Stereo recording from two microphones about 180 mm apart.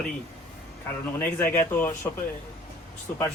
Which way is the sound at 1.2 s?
10° left (ahead or behind).